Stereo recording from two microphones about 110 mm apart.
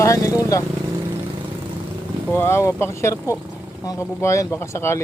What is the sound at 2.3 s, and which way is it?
Speech, 20° left (ahead or behind).